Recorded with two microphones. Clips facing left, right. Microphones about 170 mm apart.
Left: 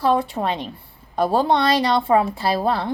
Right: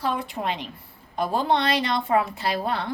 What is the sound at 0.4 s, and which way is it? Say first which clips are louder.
Speech: left 5 dB; 55° left (ahead or behind).